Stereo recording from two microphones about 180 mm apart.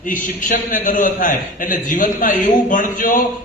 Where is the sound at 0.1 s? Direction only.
50° left (ahead or behind).